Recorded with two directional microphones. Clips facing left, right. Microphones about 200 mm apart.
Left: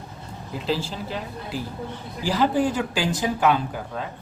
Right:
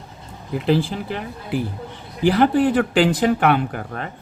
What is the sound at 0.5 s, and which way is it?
Speech, 60° right (ahead or behind).